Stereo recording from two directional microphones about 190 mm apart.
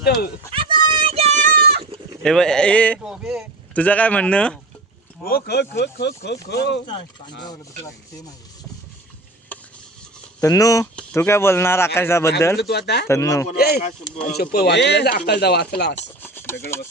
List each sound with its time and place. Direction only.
0.5 s a sound: 25° right (ahead or behind); by 1.8 s 55° right (ahead or behind)
2.2 s speech: 5° left (ahead or behind)
3.0 s speech: 5° right (ahead or behind)
3.8 s speech: 10° left (ahead or behind)
5.2 s speech: 55° left (ahead or behind)
10.4 s speech: 20° left (ahead or behind)
12.5 s speech: 60° left (ahead or behind)
13.1 s speech: 15° left (ahead or behind)
13.6 s speech: 55° left (ahead or behind)
16.0 s speech: 10° left (ahead or behind)